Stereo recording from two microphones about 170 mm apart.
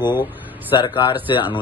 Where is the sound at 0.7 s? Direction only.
25° left (ahead or behind).